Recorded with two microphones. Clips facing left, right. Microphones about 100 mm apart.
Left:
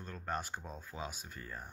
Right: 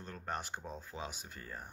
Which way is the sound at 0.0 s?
25° right (ahead or behind).